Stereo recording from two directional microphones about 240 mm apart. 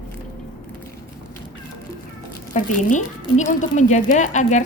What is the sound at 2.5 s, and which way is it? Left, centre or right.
A woman's voice, left.